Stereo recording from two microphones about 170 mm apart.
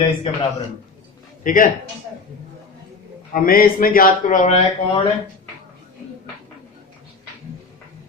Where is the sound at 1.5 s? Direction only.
50° left (ahead or behind).